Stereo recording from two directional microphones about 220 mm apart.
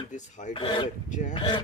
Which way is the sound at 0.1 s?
35° left (ahead or behind).